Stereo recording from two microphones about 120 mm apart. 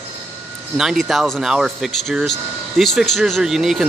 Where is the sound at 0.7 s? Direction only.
5° right (ahead or behind).